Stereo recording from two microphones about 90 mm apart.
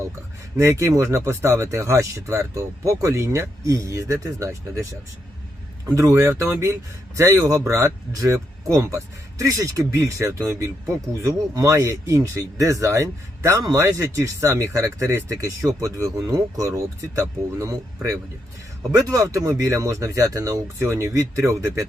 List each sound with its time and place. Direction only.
0.5 s speech: 35° right (ahead or behind)